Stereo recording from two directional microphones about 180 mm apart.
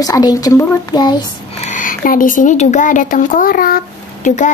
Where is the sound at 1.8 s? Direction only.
50° left (ahead or behind).